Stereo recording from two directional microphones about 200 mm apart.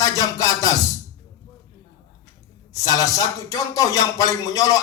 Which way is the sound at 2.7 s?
15° left (ahead or behind).